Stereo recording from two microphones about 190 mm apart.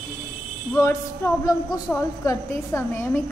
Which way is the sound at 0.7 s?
15° left (ahead or behind).